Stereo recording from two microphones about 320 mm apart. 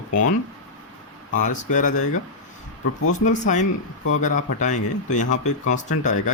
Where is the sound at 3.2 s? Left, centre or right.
Left.